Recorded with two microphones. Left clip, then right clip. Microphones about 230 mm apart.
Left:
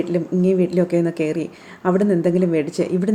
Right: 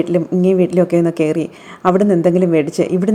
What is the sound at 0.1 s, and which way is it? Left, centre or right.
A woman's voice, centre.